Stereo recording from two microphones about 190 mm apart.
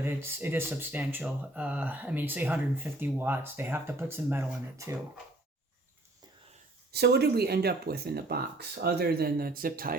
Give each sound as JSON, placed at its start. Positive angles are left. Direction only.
{"t": 0.0, "sound": "speech", "side_deg": -10}
{"t": 6.9, "sound": "speech", "side_deg": -60}